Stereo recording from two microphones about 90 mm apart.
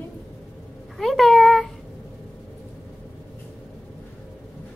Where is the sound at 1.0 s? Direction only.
5° left (ahead or behind).